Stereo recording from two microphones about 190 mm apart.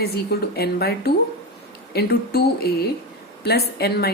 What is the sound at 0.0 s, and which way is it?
A woman's voice, 55° left (ahead or behind).